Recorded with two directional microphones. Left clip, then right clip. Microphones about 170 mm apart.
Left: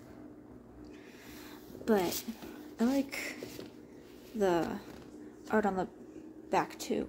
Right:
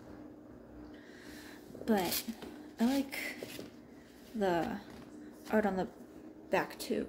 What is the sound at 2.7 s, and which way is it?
Speech, 5° left (ahead or behind).